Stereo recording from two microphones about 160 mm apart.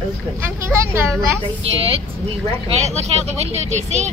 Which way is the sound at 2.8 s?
40° right (ahead or behind).